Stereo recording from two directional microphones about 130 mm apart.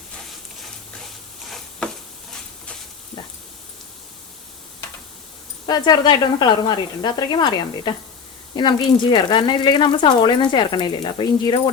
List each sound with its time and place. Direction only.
5.6 s speech: 35° left (ahead or behind)